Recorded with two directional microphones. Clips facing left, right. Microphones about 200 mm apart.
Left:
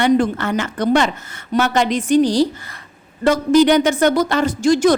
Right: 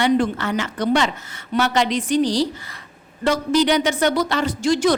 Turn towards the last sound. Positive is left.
turn(degrees=45)  # may be behind; listen again after turning